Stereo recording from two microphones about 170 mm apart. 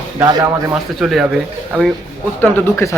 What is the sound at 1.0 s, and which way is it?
Speech, centre (ahead or behind).